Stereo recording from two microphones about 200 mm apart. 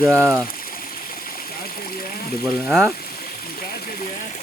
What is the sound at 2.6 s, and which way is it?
Speech, centre (ahead or behind).